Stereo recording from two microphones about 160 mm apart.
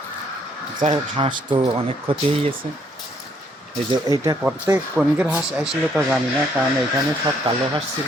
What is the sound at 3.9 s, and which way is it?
Speech, 25° right (ahead or behind).